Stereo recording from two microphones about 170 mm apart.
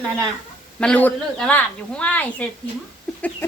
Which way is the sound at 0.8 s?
10° left (ahead or behind).